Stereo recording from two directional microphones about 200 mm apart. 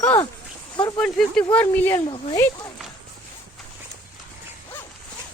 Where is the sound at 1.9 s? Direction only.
25° left (ahead or behind).